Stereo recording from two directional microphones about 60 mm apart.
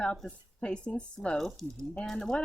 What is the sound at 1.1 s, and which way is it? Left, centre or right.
A woman's voice, centre.